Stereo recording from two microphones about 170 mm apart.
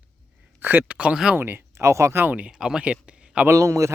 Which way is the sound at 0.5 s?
10° right (ahead or behind).